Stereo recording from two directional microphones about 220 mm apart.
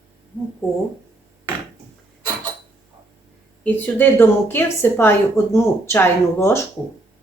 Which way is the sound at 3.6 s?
5° left (ahead or behind).